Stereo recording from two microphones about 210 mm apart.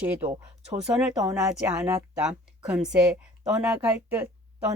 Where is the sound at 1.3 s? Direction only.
5° right (ahead or behind).